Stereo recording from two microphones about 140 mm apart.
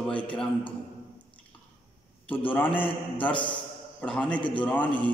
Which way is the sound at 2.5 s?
15° left (ahead or behind).